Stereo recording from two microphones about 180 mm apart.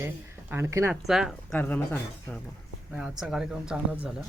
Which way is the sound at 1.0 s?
Centre (ahead or behind).